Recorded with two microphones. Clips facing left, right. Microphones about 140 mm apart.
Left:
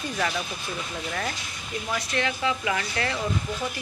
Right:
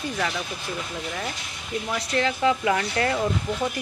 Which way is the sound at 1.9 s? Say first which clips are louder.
Right 3 dB; 35° right (ahead or behind).